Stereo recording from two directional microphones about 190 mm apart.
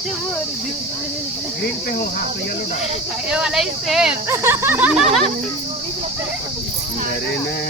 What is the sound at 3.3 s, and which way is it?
Speech, 5° right (ahead or behind).